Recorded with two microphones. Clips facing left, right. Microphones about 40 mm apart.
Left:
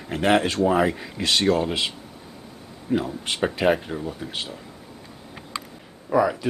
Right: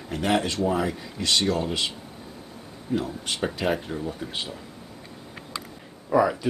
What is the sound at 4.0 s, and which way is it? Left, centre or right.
Speech, centre.